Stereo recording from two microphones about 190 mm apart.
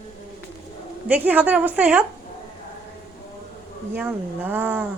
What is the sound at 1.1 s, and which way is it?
Speech, 10° right (ahead or behind).